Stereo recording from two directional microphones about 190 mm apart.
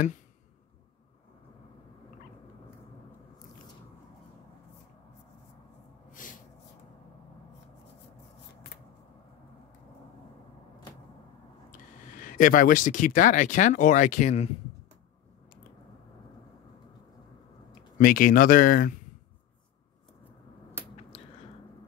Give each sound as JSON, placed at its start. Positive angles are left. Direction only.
{"t": 6.1, "sound": "gasp", "side_deg": 45}
{"t": 12.0, "sound": "speech", "side_deg": 45}
{"t": 17.9, "sound": "speech", "side_deg": 45}